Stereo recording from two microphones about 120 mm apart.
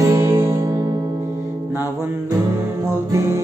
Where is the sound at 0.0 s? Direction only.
25° right (ahead or behind).